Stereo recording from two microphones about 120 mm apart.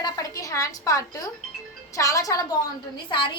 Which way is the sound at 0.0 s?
30° left (ahead or behind).